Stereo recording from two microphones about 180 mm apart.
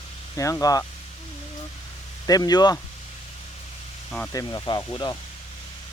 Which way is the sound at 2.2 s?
20° left (ahead or behind).